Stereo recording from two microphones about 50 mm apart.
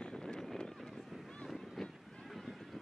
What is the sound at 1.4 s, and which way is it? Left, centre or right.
Boat, centre.